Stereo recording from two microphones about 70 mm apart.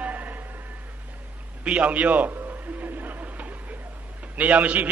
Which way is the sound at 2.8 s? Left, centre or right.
Right.